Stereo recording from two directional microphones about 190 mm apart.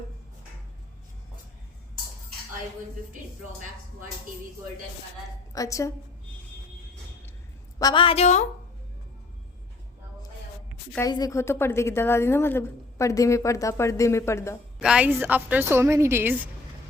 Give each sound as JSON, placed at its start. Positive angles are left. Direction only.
{"t": 5.5, "sound": "a woman's voice", "side_deg": 15}
{"t": 7.8, "sound": "a woman's voice", "side_deg": 25}
{"t": 10.9, "sound": "a woman's voice", "side_deg": 20}
{"t": 14.8, "sound": "a woman's voice", "side_deg": -5}